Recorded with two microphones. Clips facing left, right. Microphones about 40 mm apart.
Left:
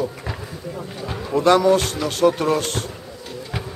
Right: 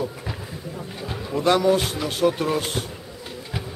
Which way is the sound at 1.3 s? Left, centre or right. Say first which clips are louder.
Left 5 dB; left.